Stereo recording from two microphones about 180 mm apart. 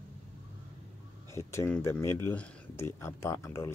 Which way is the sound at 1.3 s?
15° left (ahead or behind).